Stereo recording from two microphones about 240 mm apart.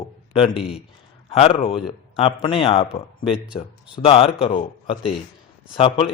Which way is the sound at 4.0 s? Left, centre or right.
Left.